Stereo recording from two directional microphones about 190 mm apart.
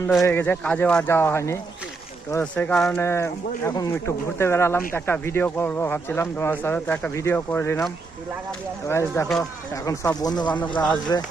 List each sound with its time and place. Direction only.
0.3 s speech: 10° left (ahead or behind)
8.9 s speech: 15° left (ahead or behind)